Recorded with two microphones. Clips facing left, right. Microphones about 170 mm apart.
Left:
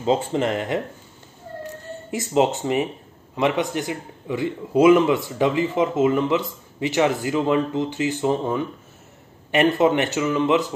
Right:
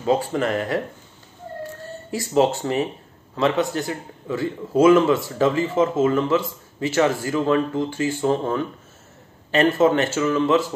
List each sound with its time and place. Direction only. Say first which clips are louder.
0.0 s speech: even; 20° left (ahead or behind)
2.0 s a man's voice: right 1 dB; 20° left (ahead or behind)